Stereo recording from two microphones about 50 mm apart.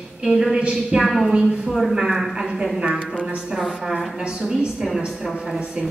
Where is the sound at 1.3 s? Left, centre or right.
Centre.